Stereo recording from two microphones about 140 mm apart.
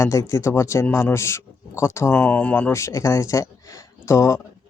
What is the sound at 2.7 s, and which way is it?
Speech, 20° left (ahead or behind).